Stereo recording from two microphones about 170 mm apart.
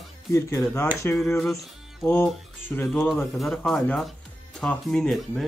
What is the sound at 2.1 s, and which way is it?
Speech, 10° left (ahead or behind).